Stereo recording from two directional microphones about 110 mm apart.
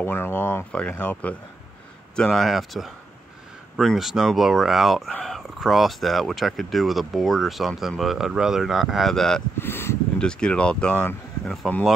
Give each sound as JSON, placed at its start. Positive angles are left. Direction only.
{"t": 0.0, "sound": "speech", "side_deg": 20}
{"t": 9.6, "sound": "speech", "side_deg": 20}
{"t": 10.1, "sound": "speech", "side_deg": 10}